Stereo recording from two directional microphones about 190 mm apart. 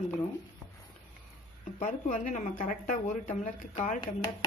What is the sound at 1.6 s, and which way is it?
Speech, 40° left (ahead or behind).